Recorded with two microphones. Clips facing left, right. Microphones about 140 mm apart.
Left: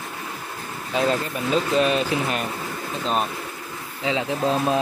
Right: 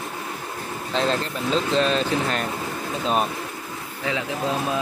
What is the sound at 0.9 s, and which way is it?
Speech, 10° left (ahead or behind).